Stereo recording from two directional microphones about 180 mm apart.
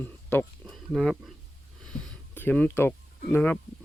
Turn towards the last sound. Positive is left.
turn(degrees=10)  # may be behind; listen again after turning